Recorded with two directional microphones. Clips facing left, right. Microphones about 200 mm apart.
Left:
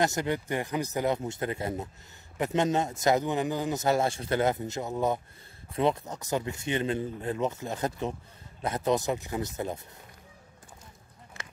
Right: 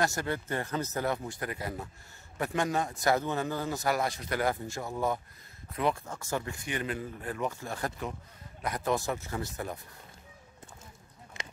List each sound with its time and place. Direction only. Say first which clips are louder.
0.0 s a man's voice: left 3 dB; 20° left (ahead or behind)
11.4 s honk: right 2 dB; 20° right (ahead or behind)